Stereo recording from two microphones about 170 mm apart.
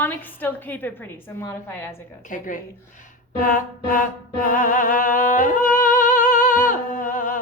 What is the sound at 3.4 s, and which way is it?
Music, 50° left (ahead or behind).